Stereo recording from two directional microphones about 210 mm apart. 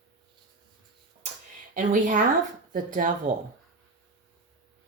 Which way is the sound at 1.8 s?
40° right (ahead or behind).